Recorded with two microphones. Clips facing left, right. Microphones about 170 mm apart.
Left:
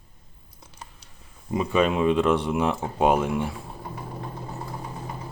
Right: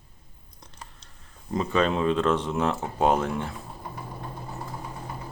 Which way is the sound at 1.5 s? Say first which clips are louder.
Left 2 dB; 10° left (ahead or behind).